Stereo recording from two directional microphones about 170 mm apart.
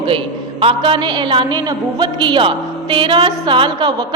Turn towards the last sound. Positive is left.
turn(degrees=-30)  # may be behind; listen again after turning